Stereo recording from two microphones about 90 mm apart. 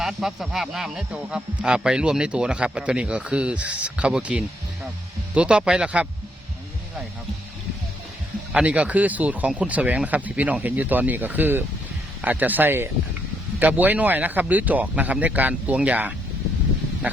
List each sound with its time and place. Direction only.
0.0 s speech: 5° right (ahead or behind)
8.5 s speech: 15° right (ahead or behind)